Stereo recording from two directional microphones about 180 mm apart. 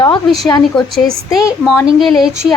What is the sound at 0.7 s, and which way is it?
A woman's voice, centre (ahead or behind).